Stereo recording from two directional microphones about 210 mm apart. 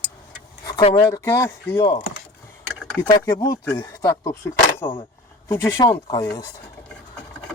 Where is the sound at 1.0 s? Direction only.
15° left (ahead or behind).